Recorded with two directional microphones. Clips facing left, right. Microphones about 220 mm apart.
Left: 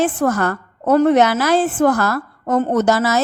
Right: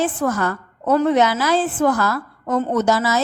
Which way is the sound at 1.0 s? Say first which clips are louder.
Left 3 dB; 65° left (ahead or behind).